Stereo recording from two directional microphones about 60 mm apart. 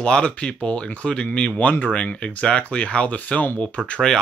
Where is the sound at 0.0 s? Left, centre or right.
Centre.